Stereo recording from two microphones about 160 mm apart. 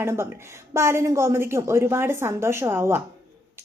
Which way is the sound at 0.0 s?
15° right (ahead or behind).